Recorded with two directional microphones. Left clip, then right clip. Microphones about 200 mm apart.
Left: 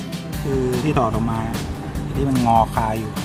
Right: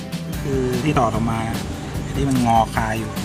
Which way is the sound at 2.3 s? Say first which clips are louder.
Left 1 dB; 5° left (ahead or behind).